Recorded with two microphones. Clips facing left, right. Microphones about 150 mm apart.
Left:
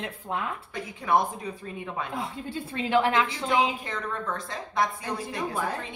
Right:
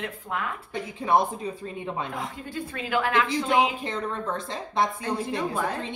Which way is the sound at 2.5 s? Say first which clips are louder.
Left 3 dB; 25° left (ahead or behind).